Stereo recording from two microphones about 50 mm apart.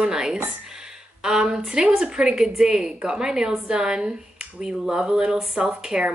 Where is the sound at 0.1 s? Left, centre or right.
Centre.